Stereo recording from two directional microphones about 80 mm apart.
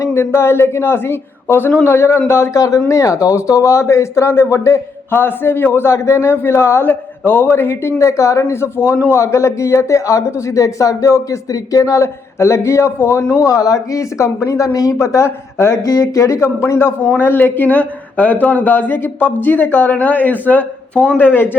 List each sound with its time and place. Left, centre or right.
0.0 s speech: left